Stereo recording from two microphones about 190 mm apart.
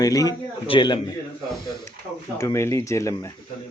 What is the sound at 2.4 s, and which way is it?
Speech, 15° left (ahead or behind).